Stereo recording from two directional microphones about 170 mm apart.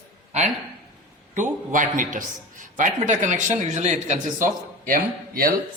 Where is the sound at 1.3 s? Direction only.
50° right (ahead or behind).